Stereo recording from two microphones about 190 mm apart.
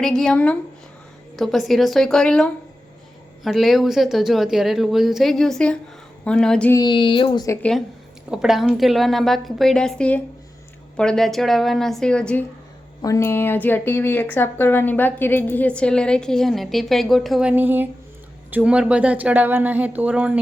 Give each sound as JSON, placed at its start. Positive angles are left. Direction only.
{"t": 0.0, "sound": "a woman's voice", "side_deg": 5}
{"t": 6.7, "sound": "speech", "side_deg": 25}
{"t": 8.3, "sound": "a woman's voice", "side_deg": -5}